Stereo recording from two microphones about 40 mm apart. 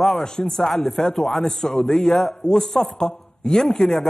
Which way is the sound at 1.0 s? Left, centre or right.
Centre.